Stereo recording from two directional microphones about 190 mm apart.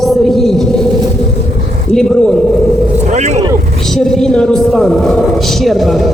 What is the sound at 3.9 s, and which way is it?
A man's voice, centre (ahead or behind).